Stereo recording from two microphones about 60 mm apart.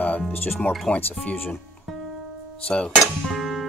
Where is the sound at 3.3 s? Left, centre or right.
Centre.